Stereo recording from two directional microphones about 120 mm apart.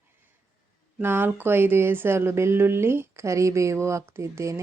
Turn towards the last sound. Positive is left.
turn(degrees=-25)  # may be behind; listen again after turning